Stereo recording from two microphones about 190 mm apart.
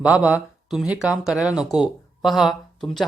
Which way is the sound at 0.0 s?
5° right (ahead or behind).